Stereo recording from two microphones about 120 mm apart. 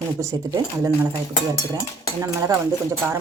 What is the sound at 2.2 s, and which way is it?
Speech, 25° right (ahead or behind).